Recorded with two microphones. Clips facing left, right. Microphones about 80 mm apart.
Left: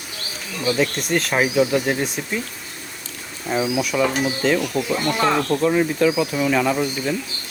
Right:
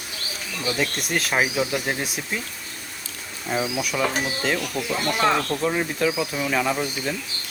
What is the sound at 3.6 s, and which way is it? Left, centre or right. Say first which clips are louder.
Speech: left 5 dB; centre.